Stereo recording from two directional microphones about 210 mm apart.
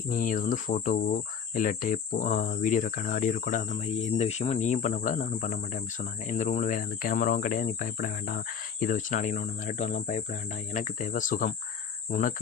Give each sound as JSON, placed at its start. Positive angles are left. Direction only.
{"t": 0.1, "sound": "speech", "side_deg": 40}